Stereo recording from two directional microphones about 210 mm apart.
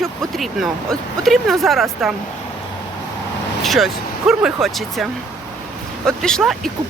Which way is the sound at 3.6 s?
Centre (ahead or behind).